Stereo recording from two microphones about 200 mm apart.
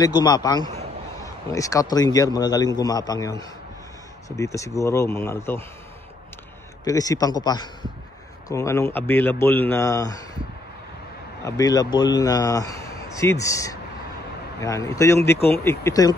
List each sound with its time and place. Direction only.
0.0 s a man's voice: 20° left (ahead or behind)
6.8 s a man's voice: 20° left (ahead or behind)
11.4 s a man's voice: 15° left (ahead or behind)